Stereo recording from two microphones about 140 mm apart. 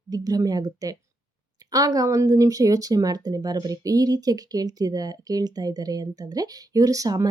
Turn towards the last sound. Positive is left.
turn(degrees=-25)  # may be behind; listen again after turning